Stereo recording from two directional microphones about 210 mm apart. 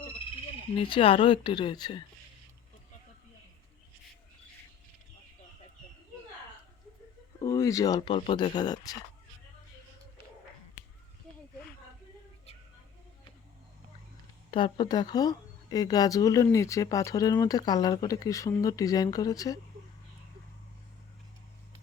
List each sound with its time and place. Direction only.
0.8 s speech: 25° left (ahead or behind)
7.3 s speech: 15° left (ahead or behind)
14.5 s speech: 20° left (ahead or behind)